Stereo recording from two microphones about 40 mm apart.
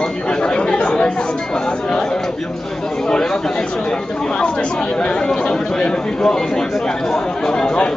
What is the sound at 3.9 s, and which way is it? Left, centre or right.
Speech, left.